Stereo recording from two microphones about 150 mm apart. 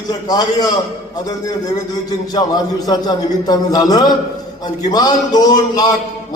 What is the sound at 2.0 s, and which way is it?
A man's voice, 25° left (ahead or behind).